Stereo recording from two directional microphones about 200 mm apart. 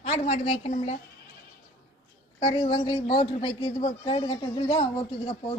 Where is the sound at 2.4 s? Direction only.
30° left (ahead or behind).